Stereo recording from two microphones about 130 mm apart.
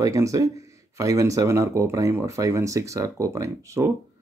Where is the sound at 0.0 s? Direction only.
25° right (ahead or behind).